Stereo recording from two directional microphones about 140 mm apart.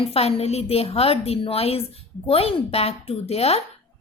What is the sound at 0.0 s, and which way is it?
A woman's voice, 45° left (ahead or behind).